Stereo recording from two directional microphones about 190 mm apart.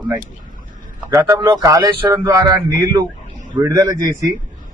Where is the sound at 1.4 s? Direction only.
20° right (ahead or behind).